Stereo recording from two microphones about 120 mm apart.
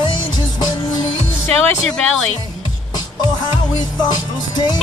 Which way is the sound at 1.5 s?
5° left (ahead or behind).